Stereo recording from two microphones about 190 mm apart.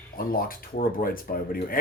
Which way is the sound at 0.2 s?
50° left (ahead or behind).